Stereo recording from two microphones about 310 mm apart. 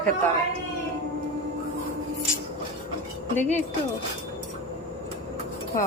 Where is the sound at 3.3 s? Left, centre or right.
Left.